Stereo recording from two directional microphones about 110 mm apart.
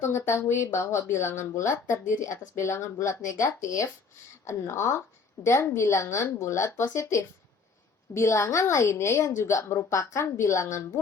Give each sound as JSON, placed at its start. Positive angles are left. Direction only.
{"t": 0.0, "sound": "speech", "side_deg": 25}